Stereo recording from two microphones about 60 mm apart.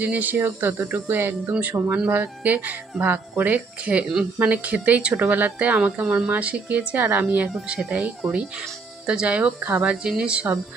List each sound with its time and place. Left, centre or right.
0.0 s a woman's voice: right